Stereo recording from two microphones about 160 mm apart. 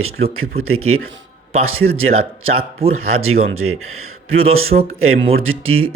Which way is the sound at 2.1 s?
40° right (ahead or behind).